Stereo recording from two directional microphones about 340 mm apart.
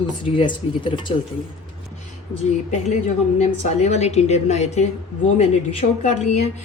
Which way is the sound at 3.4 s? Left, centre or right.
Centre.